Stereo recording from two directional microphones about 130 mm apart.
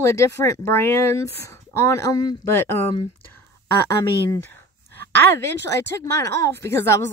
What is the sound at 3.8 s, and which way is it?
Speech, 20° left (ahead or behind).